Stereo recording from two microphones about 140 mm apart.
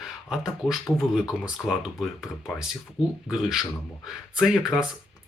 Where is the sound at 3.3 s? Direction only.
Centre (ahead or behind).